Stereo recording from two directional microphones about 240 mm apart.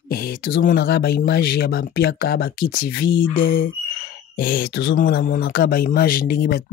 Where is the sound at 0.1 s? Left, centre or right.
Left.